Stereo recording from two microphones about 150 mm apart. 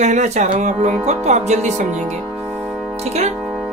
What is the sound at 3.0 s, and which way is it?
Music, 45° right (ahead or behind).